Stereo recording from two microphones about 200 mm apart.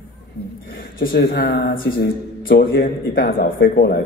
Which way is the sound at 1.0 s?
50° left (ahead or behind).